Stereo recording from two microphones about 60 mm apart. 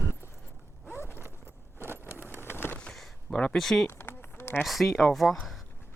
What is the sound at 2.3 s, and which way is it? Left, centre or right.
Vehicle, left.